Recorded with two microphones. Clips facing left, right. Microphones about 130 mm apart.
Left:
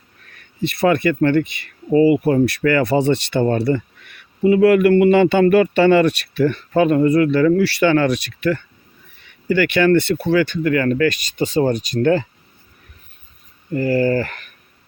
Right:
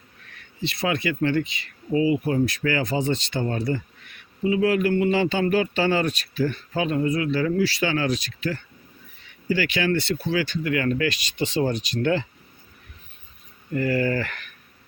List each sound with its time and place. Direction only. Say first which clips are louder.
0.6 s speech: left 9 dB; 55° left (ahead or behind)
13.7 s speech: left 6 dB; 35° left (ahead or behind)